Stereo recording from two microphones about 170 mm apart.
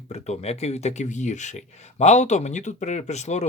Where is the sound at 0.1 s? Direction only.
40° left (ahead or behind).